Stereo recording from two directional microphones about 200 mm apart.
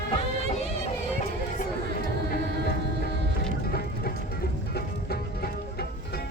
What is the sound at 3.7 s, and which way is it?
Music, 50° left (ahead or behind).